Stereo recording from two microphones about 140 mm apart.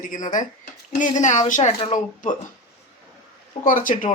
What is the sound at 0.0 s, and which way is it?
Speech, 65° left (ahead or behind).